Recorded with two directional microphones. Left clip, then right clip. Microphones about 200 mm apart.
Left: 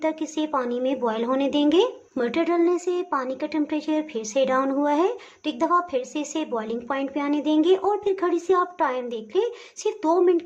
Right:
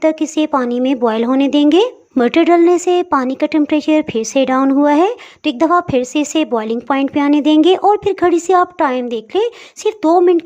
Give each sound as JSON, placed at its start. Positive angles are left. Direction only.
{"t": 0.0, "sound": "speech", "side_deg": -35}